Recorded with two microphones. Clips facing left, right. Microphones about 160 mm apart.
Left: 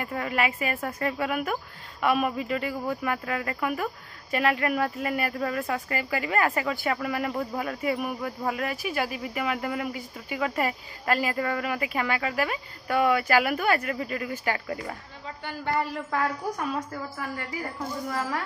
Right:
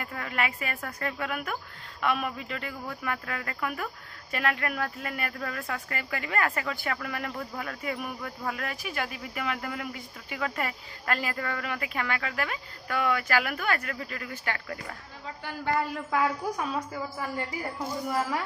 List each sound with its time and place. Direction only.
0.0 s a woman's voice: 10° left (ahead or behind)
0.7 s a woman's voice: 20° left (ahead or behind); by 7.0 s 5° left (ahead or behind)
7.0 s a woman's voice: 15° left (ahead or behind)
15.4 s a woman's voice: 5° right (ahead or behind)
17.7 s speech: 10° right (ahead or behind)